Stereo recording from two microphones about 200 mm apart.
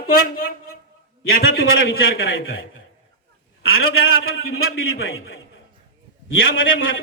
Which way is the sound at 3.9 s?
90° left.